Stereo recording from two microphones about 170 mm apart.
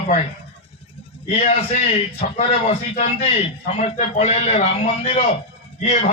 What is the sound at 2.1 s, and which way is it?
Speech, 40° left (ahead or behind).